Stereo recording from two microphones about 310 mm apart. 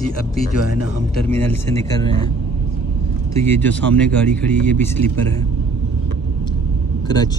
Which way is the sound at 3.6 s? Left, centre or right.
Centre.